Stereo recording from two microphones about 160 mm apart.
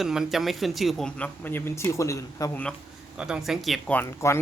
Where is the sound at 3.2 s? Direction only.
5° right (ahead or behind).